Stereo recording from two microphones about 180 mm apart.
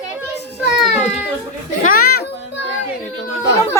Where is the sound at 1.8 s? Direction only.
55° left (ahead or behind).